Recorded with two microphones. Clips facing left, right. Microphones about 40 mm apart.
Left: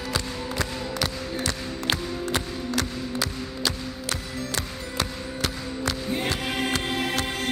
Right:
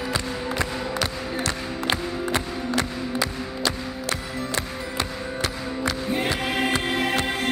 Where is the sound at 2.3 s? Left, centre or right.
Right.